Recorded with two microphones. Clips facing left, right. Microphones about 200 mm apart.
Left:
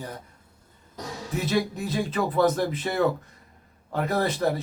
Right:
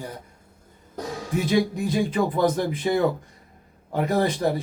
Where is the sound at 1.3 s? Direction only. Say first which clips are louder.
Right 4 dB; 10° right (ahead or behind).